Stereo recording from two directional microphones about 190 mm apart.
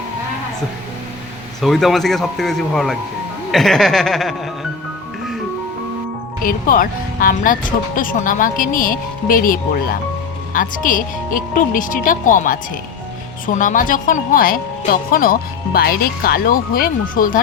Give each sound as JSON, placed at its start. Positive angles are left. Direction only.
{"t": 1.6, "sound": "speech", "side_deg": 0}
{"t": 6.4, "sound": "speech", "side_deg": 45}